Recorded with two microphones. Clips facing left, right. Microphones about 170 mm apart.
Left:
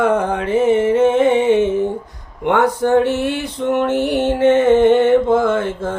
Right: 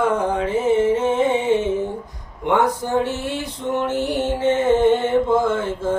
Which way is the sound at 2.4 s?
65° left (ahead or behind).